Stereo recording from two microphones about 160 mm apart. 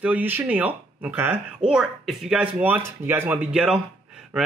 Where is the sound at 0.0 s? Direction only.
10° right (ahead or behind).